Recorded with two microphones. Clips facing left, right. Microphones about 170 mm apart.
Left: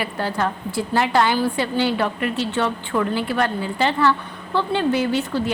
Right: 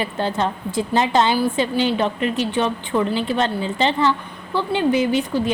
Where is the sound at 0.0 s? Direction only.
25° right (ahead or behind).